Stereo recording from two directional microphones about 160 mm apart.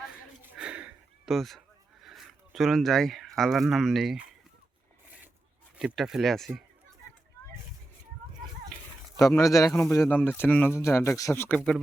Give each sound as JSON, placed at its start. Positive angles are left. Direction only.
{"t": 0.5, "sound": "a sound", "side_deg": -5}
{"t": 5.7, "sound": "speech", "side_deg": -5}
{"t": 9.2, "sound": "speech", "side_deg": 20}